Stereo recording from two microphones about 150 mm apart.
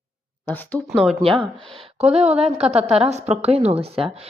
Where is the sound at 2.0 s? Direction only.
45° right (ahead or behind).